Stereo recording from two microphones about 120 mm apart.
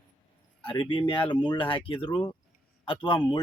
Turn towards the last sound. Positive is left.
turn(degrees=40)  # may be behind; listen again after turning